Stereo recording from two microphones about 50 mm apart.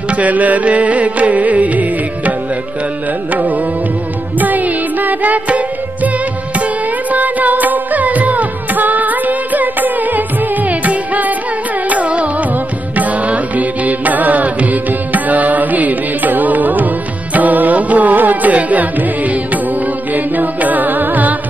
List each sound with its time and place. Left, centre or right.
0.1 s music: right
3.3 s music: right